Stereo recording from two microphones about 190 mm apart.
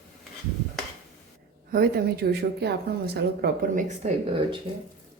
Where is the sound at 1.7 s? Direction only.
55° right (ahead or behind).